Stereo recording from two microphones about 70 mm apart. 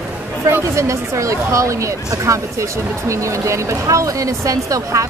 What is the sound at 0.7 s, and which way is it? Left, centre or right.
A woman's voice, right.